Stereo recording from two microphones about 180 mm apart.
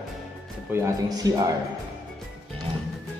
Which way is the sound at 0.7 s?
15° right (ahead or behind).